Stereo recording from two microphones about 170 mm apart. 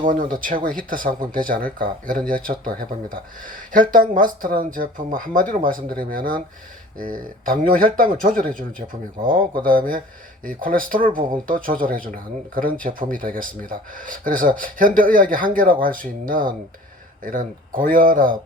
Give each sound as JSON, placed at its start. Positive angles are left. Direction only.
{"t": 0.1, "sound": "speech", "side_deg": -55}